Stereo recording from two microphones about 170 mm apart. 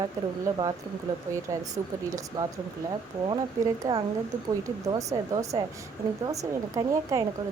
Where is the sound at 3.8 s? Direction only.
20° right (ahead or behind).